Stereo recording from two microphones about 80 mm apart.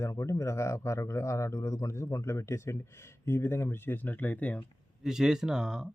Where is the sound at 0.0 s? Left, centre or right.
Left; by 4.6 s centre.